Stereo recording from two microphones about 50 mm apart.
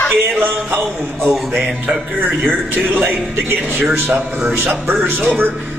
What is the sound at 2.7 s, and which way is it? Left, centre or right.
A man's voice, right.